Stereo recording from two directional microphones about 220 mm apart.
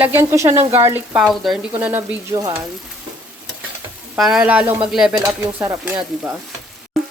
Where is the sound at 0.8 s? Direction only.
10° right (ahead or behind).